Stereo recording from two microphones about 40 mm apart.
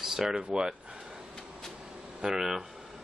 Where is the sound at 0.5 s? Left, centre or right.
Centre.